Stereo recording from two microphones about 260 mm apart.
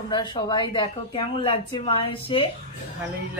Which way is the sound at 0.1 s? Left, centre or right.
Centre.